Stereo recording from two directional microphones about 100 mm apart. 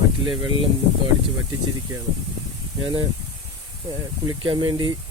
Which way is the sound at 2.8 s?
50° right (ahead or behind).